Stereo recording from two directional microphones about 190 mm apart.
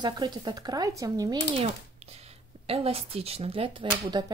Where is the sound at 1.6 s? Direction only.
35° right (ahead or behind).